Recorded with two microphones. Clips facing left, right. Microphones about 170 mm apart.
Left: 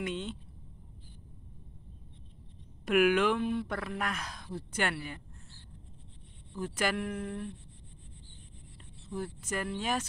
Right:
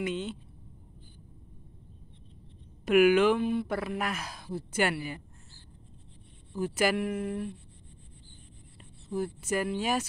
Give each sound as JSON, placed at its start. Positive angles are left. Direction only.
{"t": 0.0, "sound": "speech", "side_deg": 0}
{"t": 2.8, "sound": "speech", "side_deg": 0}
{"t": 6.5, "sound": "speech", "side_deg": -10}
{"t": 9.1, "sound": "speech", "side_deg": -10}